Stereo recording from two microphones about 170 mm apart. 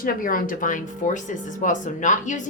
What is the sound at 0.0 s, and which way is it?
Speech, 55° left (ahead or behind).